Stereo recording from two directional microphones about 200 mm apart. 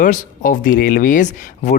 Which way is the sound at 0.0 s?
40° left (ahead or behind).